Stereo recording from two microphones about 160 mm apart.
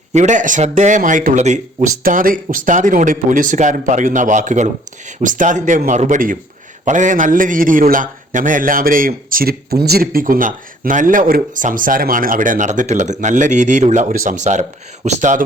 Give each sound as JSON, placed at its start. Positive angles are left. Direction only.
{"t": 0.1, "sound": "speech", "side_deg": -50}
{"t": 2.0, "sound": "a man's voice", "side_deg": -60}